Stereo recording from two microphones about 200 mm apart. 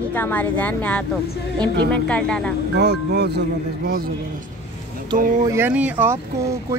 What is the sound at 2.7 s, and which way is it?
Speech, 55° right (ahead or behind).